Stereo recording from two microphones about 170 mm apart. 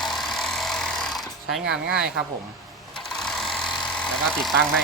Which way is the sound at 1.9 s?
5° right (ahead or behind).